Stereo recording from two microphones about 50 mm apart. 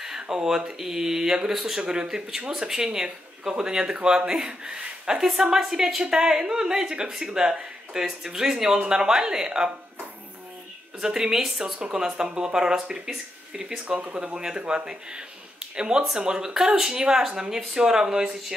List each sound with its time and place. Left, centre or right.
0.0 s speech: centre
11.0 s speech: centre